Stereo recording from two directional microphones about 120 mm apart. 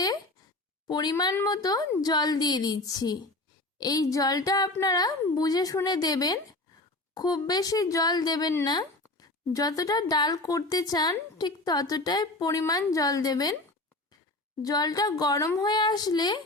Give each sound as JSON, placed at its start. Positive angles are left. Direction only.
{"t": 0.9, "sound": "a woman's voice", "side_deg": 35}
{"t": 14.6, "sound": "a woman's voice", "side_deg": 30}